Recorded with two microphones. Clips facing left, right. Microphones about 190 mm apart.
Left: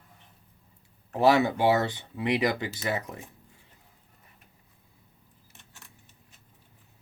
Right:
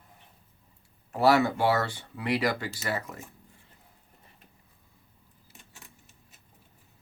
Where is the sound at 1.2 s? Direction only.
20° left (ahead or behind).